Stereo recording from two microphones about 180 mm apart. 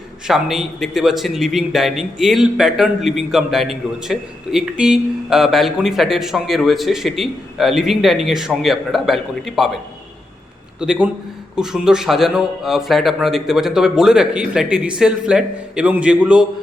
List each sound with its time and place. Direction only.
0.3 s a man's voice: centre (ahead or behind)
10.8 s a man's voice: 5° right (ahead or behind)